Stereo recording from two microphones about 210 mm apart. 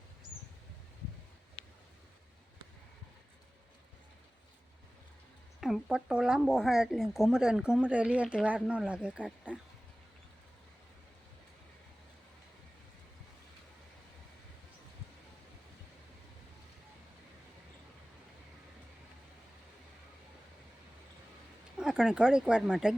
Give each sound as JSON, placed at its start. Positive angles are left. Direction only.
{"t": 5.5, "sound": "speech", "side_deg": 0}
{"t": 21.8, "sound": "speech", "side_deg": -5}